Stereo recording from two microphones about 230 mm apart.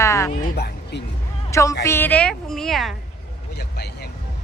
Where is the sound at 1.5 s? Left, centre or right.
Centre.